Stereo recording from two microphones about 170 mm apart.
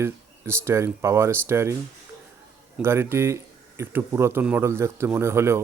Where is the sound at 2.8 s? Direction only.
15° right (ahead or behind).